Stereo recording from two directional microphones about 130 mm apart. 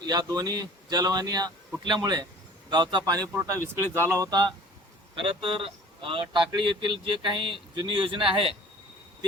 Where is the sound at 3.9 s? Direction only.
20° right (ahead or behind); by 8.5 s 45° right (ahead or behind).